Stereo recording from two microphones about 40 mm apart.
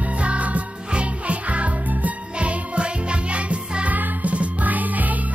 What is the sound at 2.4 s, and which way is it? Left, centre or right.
Music, right.